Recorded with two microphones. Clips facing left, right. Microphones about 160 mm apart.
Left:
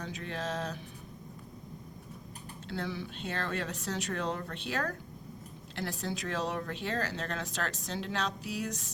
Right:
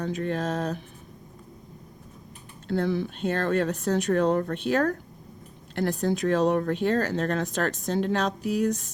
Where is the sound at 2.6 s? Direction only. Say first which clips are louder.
Right 11 dB; 50° right (ahead or behind).